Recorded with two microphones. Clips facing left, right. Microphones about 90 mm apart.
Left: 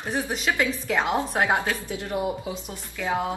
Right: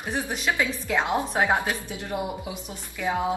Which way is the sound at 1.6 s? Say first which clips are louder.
Left 1 dB; 20° right (ahead or behind).